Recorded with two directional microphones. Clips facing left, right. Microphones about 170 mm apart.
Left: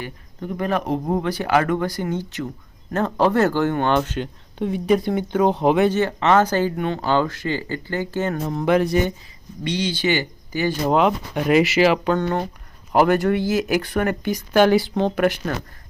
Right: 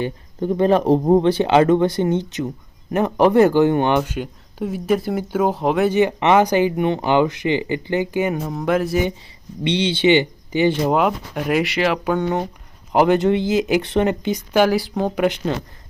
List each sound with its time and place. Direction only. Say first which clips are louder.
0.0 s speech: right 8 dB; 30° right (ahead or behind); by 5.9 s centre (ahead or behind)
5.9 s speech: right 3 dB; 15° right (ahead or behind)
9.6 s speech: right 5 dB; 25° right (ahead or behind)
10.8 s speech: even; 5° right (ahead or behind)
12.0 s speech: right 1 dB; 10° right (ahead or behind)
14.6 s speech: left 2 dB; centre (ahead or behind)
15.1 s speech: right 1 dB; 15° right (ahead or behind)